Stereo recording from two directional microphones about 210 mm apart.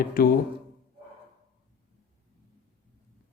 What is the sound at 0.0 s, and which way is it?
Speech, 45° left (ahead or behind).